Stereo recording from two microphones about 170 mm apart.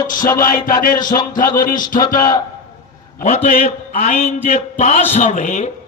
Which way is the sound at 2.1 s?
20° left (ahead or behind).